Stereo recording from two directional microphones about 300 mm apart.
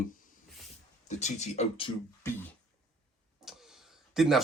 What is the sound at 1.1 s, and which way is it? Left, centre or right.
Speech, left.